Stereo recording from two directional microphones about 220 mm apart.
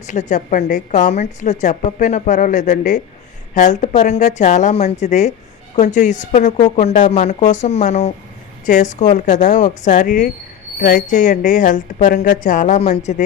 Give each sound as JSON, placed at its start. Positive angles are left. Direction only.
{"t": 0.1, "sound": "a woman's voice", "side_deg": 35}